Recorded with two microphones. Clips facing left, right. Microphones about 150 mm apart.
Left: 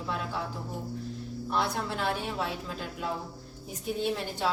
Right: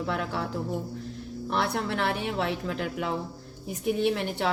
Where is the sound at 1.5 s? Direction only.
70° right (ahead or behind).